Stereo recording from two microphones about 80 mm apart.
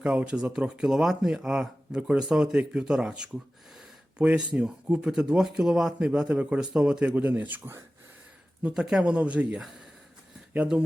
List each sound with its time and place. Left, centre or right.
0.0 s speech: centre
8.6 s speech: centre